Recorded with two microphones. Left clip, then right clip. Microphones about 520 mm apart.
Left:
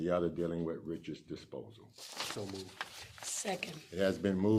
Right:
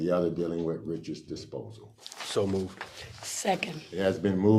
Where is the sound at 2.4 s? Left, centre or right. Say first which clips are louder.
Right 15 dB; right.